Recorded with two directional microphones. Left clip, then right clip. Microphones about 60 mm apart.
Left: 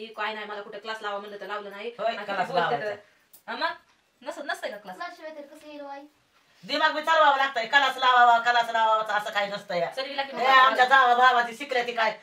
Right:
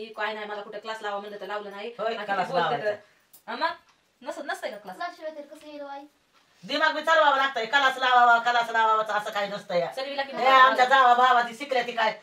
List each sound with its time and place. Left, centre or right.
0.1 s a woman's voice: centre
6.7 s speech: centre
9.8 s a woman's voice: centre
10.3 s a sound: left
11.2 s speech: centre
11.7 s a sound: left